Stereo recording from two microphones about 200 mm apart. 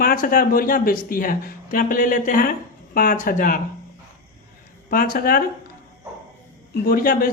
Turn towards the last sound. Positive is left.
turn(degrees=45)  # may be behind; listen again after turning